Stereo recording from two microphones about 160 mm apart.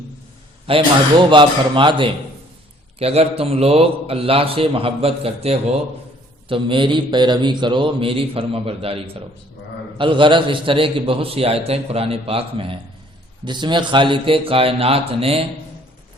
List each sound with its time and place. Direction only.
0.7 s a man's voice: 35° right (ahead or behind)